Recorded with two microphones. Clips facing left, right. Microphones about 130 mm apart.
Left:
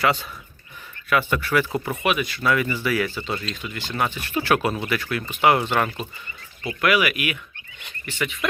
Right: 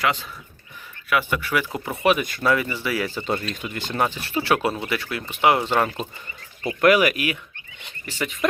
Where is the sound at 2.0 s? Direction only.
40° right (ahead or behind).